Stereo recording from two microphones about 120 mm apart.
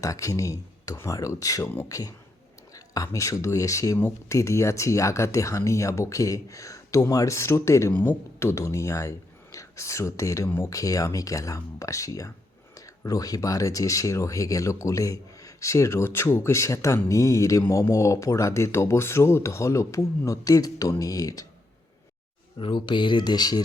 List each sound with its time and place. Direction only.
0.0 s speech: 25° left (ahead or behind)
22.5 s speech: 45° left (ahead or behind)